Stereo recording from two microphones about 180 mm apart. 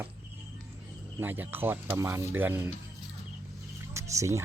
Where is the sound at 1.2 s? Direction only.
10° right (ahead or behind).